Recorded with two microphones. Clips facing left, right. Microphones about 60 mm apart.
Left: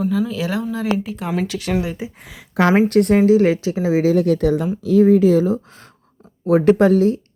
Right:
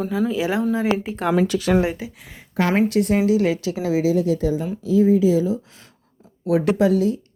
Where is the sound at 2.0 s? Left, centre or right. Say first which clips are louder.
Left 3 dB; left.